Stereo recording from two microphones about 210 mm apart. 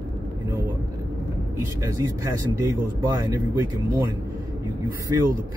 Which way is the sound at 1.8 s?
15° right (ahead or behind).